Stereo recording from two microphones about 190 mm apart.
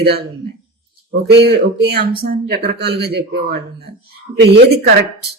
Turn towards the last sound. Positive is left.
turn(degrees=-60)  # may be behind; listen again after turning